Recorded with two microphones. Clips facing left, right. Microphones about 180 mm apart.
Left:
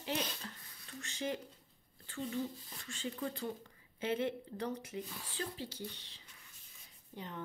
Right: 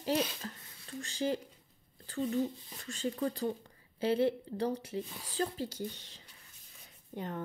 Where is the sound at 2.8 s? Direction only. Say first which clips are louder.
Right 6 dB; 40° right (ahead or behind).